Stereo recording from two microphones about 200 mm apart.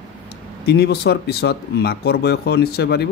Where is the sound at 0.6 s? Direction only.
55° left (ahead or behind).